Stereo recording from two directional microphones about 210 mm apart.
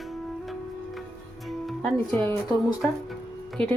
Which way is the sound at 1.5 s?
Centre (ahead or behind).